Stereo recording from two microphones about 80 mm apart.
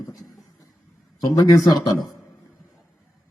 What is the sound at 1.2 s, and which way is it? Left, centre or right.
Speech, left.